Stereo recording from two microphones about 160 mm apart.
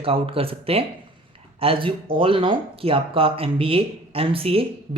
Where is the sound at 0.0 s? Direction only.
35° right (ahead or behind).